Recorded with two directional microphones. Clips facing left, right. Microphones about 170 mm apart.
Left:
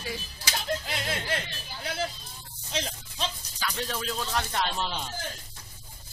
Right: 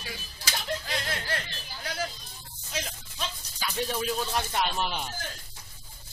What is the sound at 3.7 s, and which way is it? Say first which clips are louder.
Speech: right 3 dB; 15° right (ahead or behind).